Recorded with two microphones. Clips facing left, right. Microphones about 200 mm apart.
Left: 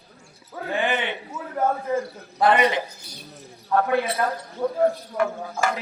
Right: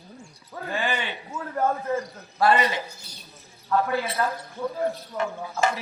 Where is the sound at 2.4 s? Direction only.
20° left (ahead or behind).